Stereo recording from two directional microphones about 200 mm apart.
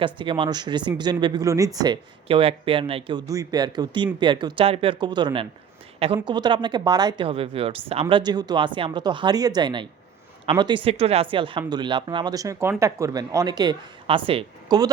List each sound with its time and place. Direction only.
0.0 s speech: 25° right (ahead or behind)